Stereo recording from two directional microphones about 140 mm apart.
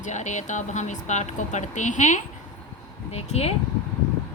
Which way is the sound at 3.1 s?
50° left (ahead or behind).